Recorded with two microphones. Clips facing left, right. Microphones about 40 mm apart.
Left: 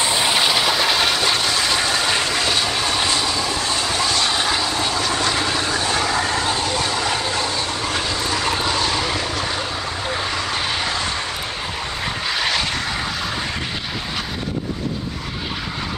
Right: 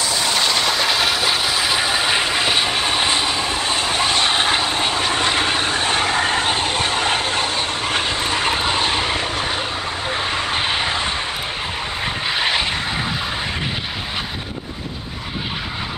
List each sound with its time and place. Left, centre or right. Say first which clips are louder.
0.0 s train: left 1 dB; left; by 9.7 s right
10.2 s vehicle: right 2 dB; right
12.3 s vehicle: right 2 dB; right